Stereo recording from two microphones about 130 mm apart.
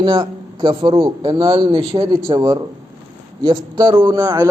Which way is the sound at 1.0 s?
30° right (ahead or behind).